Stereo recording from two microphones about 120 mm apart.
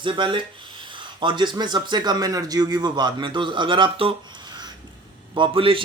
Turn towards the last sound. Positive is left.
turn(degrees=-45)  # may be behind; listen again after turning